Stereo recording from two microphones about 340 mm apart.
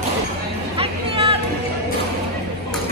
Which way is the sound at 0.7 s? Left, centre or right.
Centre.